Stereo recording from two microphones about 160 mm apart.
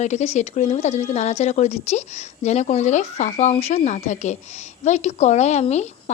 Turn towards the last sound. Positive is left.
turn(degrees=45)  # may be behind; listen again after turning